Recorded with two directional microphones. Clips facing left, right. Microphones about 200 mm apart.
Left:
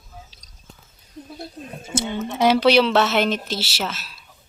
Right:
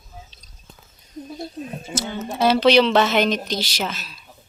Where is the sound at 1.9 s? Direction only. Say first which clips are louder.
Left 4 dB; 25° left (ahead or behind).